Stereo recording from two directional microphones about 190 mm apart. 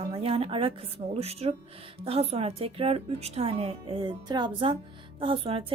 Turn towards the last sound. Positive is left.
turn(degrees=-25)  # may be behind; listen again after turning